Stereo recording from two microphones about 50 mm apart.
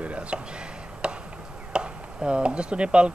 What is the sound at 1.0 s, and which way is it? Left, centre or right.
Chop, centre.